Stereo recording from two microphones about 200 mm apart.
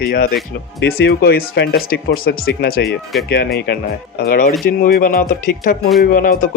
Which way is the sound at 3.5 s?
55° left (ahead or behind).